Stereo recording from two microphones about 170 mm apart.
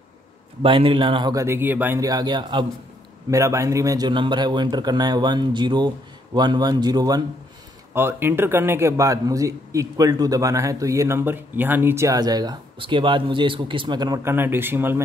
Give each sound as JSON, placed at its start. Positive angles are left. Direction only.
{"t": 0.6, "sound": "a man's voice", "side_deg": -30}